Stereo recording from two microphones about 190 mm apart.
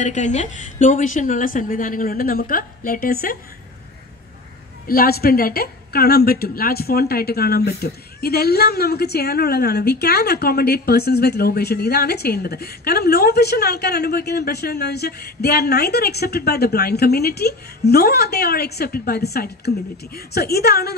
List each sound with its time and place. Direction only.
0.0 s a woman's voice: 40° left (ahead or behind)
4.8 s a woman's voice: 55° left (ahead or behind)